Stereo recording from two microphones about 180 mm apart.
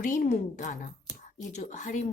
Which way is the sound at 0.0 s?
45° left (ahead or behind).